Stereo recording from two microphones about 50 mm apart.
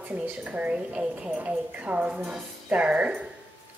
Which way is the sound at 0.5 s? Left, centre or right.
Right.